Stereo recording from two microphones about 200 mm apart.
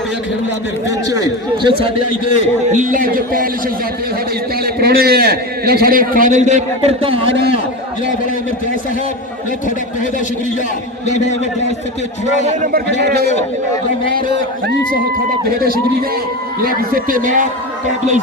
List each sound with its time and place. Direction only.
1.1 s a man's voice: 20° right (ahead or behind)
1.8 s a man's voice: 40° left (ahead or behind)
2.6 s a man's voice: 40° right (ahead or behind)
4.6 s a man's voice: 50° right (ahead or behind); by 7.3 s 30° right (ahead or behind)
11.0 s a man's voice: 35° left (ahead or behind)
12.5 s a man's voice: 40° right (ahead or behind)
12.9 s a man's voice: 55° right (ahead or behind)
15.4 s a man's voice: 50° right (ahead or behind)